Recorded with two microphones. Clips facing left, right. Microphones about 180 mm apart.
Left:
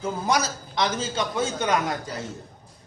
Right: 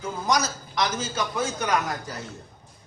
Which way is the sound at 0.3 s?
30° left (ahead or behind).